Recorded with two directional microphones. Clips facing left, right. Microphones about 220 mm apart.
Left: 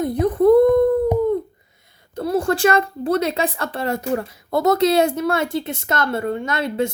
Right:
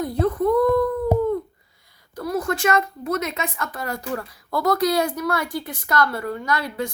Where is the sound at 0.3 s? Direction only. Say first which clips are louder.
Left 8 dB; 30° left (ahead or behind).